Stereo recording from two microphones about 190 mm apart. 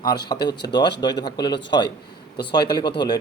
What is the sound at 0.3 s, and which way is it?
A man's voice, 20° left (ahead or behind).